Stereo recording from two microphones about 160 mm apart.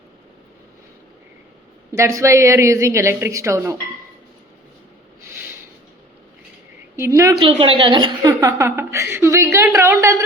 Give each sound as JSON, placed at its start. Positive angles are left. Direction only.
{"t": 1.9, "sound": "a woman's voice", "side_deg": -20}
{"t": 7.3, "sound": "a woman's voice", "side_deg": -35}